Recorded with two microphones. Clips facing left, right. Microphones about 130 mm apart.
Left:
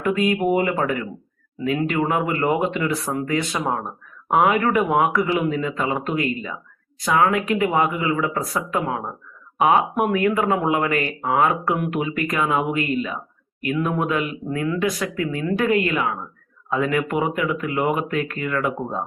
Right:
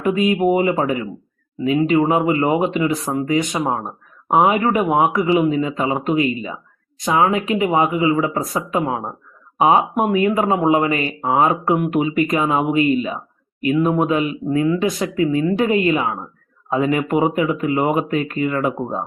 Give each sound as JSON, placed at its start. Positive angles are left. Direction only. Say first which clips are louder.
{"t": 0.0, "sound": "speech", "louder": "right 3 dB", "side_deg": -20}